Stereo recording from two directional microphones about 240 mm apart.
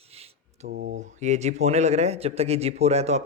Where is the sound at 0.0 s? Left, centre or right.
Right.